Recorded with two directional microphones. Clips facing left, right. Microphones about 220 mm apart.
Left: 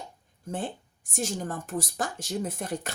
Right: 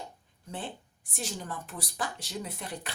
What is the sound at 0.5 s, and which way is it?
Speech, 45° left (ahead or behind).